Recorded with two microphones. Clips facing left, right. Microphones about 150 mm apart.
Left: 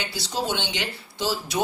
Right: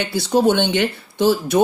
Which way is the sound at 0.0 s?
55° right (ahead or behind).